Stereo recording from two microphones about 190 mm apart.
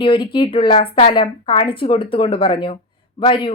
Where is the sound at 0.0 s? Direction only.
25° left (ahead or behind).